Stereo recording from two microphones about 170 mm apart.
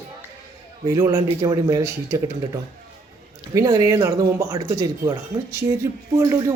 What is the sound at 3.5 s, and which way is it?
Speech, 20° right (ahead or behind).